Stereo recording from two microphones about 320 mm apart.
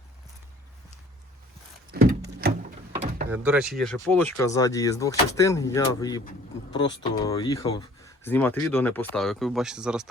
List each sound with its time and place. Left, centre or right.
1.9 s a sound: right
2.9 s door: centre
3.2 s speech: centre